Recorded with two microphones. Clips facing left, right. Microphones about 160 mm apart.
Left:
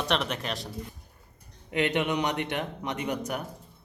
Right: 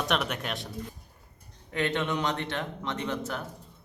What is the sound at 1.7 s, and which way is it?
A man's voice, 15° left (ahead or behind).